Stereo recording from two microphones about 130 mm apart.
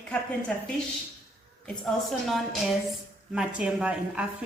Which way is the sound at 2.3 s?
Centre (ahead or behind).